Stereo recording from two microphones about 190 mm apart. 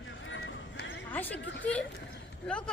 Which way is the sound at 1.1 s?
10° left (ahead or behind).